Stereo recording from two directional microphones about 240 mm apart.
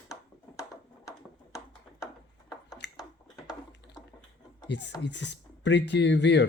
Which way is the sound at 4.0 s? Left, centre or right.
Centre.